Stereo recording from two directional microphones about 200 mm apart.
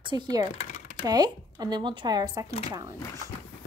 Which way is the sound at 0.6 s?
35° left (ahead or behind).